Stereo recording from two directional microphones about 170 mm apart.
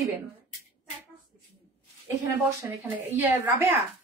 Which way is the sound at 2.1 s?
15° right (ahead or behind).